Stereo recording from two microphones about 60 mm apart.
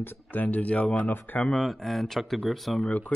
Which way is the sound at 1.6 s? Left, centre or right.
Centre.